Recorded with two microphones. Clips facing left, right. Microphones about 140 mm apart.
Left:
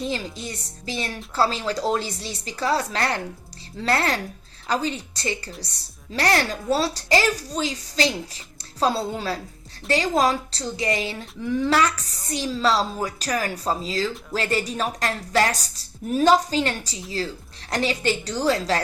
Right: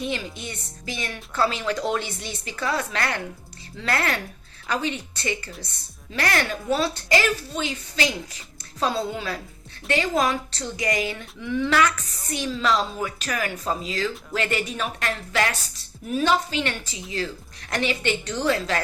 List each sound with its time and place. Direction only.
0.0 s speech: 35° left (ahead or behind)